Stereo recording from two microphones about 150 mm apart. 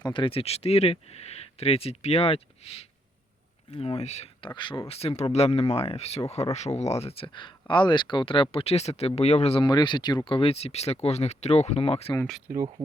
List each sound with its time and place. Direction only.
0.0 s speech: 35° left (ahead or behind)
9.6 s speech: 30° left (ahead or behind)